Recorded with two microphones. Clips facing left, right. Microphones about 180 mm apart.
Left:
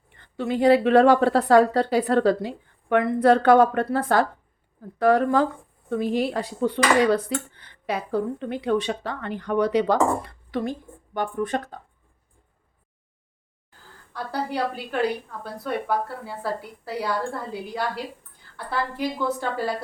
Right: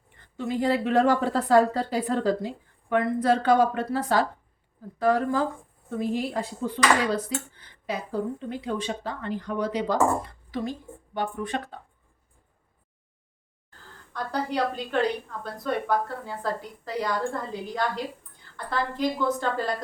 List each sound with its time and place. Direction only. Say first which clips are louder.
0.3 s speech: left 7 dB; 70° left (ahead or behind); by 4.3 s 55° left (ahead or behind)
4.9 s speech: left 4 dB; 65° left (ahead or behind); by 11.8 s 45° left (ahead or behind)
14.1 s a woman's voice: even; 10° left (ahead or behind)